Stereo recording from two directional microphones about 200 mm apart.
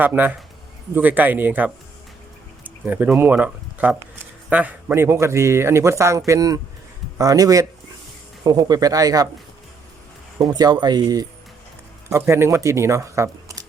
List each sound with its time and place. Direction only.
0.0 s a man's voice: 10° right (ahead or behind)
10.5 s speech: 20° right (ahead or behind)